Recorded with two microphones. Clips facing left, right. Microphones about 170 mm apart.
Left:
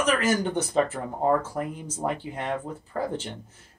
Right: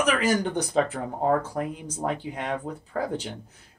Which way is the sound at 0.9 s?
5° left (ahead or behind).